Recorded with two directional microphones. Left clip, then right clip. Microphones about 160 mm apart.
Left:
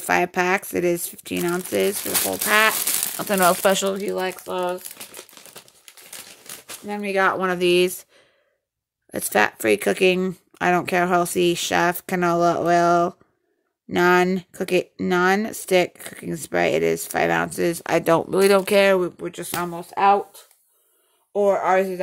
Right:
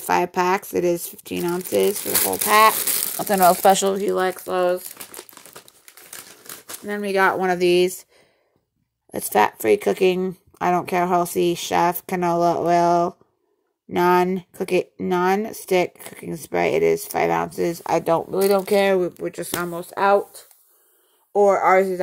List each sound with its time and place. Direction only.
0.0 s speech: 20° left (ahead or behind); by 4.0 s centre (ahead or behind)
4.0 s speech: 15° right (ahead or behind)
4.9 s crumpling: 50° right (ahead or behind)
6.9 s speech: 10° right (ahead or behind)
7.3 s speech: 5° left (ahead or behind)
9.1 s speech: 20° left (ahead or behind); by 18.8 s 35° left (ahead or behind)
18.8 s speech: 15° left (ahead or behind); by 20.2 s 5° right (ahead or behind)
21.3 s speech: 10° right (ahead or behind)